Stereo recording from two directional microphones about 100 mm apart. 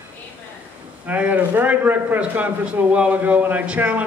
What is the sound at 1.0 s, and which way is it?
A man's voice, 15° right (ahead or behind).